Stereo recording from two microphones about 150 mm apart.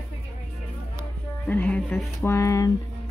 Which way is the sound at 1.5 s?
10° left (ahead or behind).